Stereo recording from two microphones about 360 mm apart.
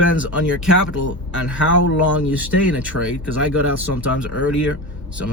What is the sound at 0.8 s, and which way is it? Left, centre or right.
Speech, left.